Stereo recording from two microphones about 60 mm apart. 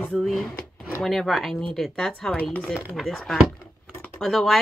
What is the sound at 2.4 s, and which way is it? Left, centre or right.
Speech, left.